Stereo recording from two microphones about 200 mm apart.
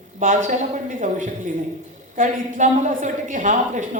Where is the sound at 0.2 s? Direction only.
40° right (ahead or behind).